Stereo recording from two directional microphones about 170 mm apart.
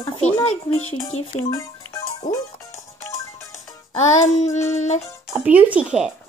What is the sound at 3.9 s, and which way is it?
Child singing, 45° left (ahead or behind).